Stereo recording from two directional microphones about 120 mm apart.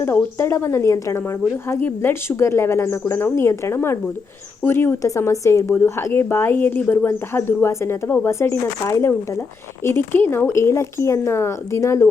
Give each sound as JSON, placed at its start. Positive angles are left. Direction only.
{"t": 0.0, "sound": "speech", "side_deg": 20}